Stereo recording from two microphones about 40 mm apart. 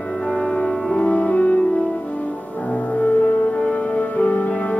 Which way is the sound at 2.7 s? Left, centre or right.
Left.